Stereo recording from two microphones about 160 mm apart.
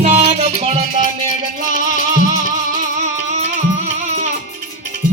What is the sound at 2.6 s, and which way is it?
Music, 50° right (ahead or behind).